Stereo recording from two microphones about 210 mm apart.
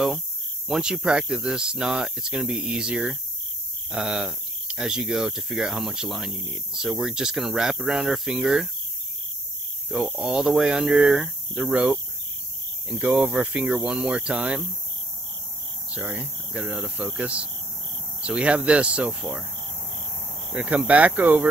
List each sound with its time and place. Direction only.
0.7 s speech: centre (ahead or behind)
9.8 s speech: centre (ahead or behind)
13.0 s speech: 5° right (ahead or behind)
15.9 s speech: 5° right (ahead or behind)
20.5 s speech: 5° right (ahead or behind)